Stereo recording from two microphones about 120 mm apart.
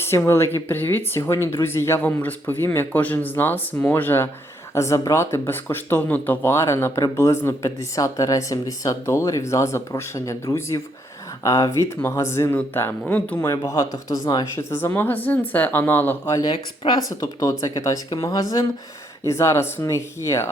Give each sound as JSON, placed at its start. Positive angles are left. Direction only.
{"t": 0.0, "sound": "speech", "side_deg": 20}
{"t": 13.7, "sound": "speech", "side_deg": 25}
{"t": 16.3, "sound": "speech", "side_deg": 35}
{"t": 17.1, "sound": "speech", "side_deg": 25}